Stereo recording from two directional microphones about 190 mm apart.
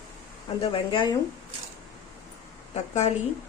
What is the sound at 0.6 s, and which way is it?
Speech, 30° left (ahead or behind).